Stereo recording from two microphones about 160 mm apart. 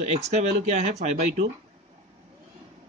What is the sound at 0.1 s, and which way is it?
Speech, 45° right (ahead or behind).